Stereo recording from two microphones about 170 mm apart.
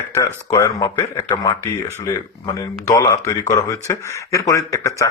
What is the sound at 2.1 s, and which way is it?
Speech, 20° left (ahead or behind).